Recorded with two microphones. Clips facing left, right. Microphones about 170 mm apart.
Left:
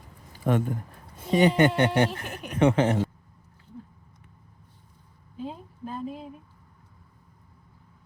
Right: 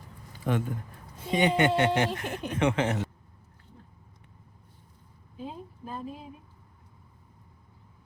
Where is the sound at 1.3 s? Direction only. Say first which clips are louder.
Left 4 dB; 40° left (ahead or behind).